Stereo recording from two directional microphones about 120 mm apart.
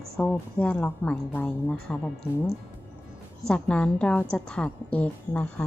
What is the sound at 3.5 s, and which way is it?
A woman's voice, 10° left (ahead or behind).